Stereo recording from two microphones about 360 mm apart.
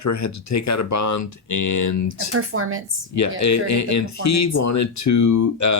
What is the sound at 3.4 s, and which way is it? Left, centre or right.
Speech, left.